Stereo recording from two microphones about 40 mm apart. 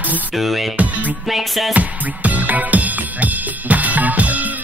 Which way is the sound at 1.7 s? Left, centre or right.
Right.